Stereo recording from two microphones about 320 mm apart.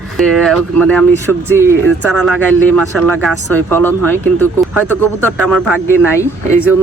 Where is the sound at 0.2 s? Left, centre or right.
Centre.